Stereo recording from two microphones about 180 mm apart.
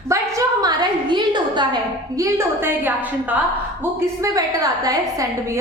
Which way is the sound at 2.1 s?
15° right (ahead or behind).